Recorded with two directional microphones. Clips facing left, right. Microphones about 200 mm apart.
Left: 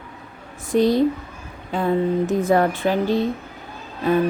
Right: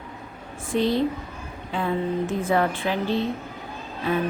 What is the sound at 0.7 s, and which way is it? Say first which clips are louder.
Speech: left 5 dB; 40° left (ahead or behind).